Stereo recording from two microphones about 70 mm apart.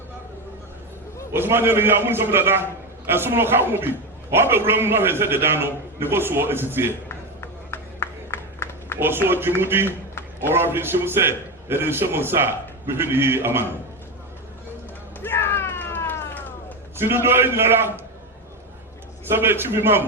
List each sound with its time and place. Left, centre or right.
1.3 s a man's voice: right
7.4 s a sound: left
9.2 s a man's voice: right
15.2 s a sound: left
17.0 s a man's voice: right
19.2 s a man's voice: right